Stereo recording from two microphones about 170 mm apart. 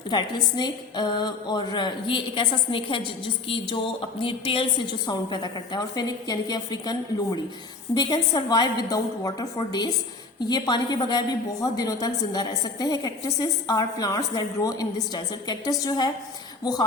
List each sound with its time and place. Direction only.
0.1 s a woman's voice: 25° left (ahead or behind)